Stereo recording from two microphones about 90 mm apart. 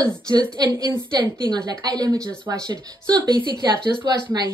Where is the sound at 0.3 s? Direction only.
50° right (ahead or behind).